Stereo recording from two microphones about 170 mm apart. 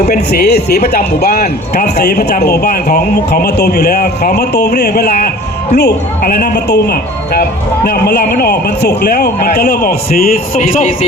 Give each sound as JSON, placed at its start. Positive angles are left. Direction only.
{"t": 0.1, "sound": "a man's voice", "side_deg": 65}